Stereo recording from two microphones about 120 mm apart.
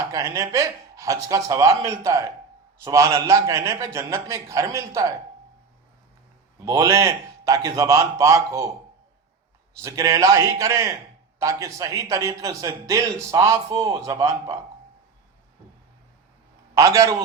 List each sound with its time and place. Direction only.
0.0 s a man's voice: 25° right (ahead or behind)
6.7 s a man's voice: 25° right (ahead or behind)
9.8 s a man's voice: 25° right (ahead or behind)
16.7 s a man's voice: 25° right (ahead or behind)